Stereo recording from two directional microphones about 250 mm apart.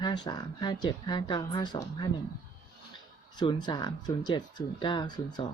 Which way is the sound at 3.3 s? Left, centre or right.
Centre.